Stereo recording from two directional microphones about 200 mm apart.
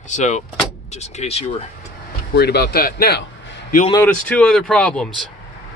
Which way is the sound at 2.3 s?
55° left (ahead or behind).